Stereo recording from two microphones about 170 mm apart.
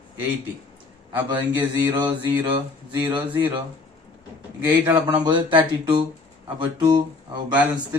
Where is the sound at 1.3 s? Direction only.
25° right (ahead or behind).